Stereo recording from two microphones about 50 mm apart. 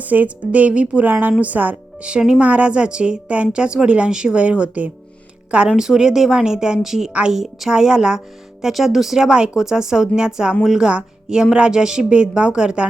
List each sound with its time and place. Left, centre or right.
0.0 s a woman's voice: right
1.0 s speech: right
2.0 s a woman's voice: right
5.6 s a woman's voice: centre
8.6 s a woman's voice: centre